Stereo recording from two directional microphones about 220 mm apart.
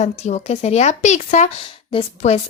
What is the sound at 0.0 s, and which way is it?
A woman's voice, 30° left (ahead or behind).